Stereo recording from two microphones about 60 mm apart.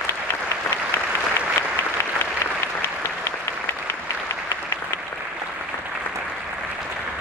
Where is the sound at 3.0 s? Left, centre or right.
Left.